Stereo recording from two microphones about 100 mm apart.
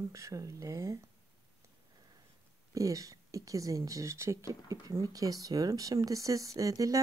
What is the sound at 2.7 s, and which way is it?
Speech, 35° right (ahead or behind).